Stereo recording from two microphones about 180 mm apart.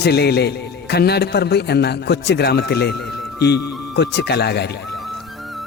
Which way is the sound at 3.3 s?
65° left (ahead or behind).